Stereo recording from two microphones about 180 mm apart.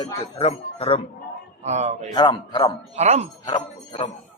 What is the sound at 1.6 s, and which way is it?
Speech, 40° right (ahead or behind).